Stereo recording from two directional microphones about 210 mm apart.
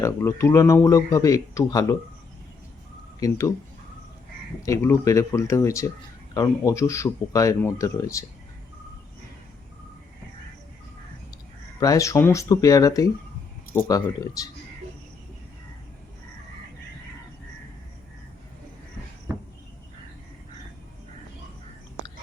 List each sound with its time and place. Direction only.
0.0 s speech: 15° left (ahead or behind)
3.2 s speech: 15° left (ahead or behind)
4.6 s speech: 15° left (ahead or behind)
11.8 s speech: 15° left (ahead or behind)